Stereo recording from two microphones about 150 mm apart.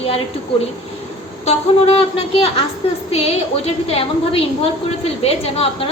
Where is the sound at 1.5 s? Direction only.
45° left (ahead or behind).